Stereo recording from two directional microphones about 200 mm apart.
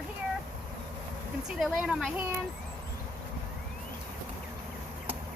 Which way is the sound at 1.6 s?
Centre (ahead or behind).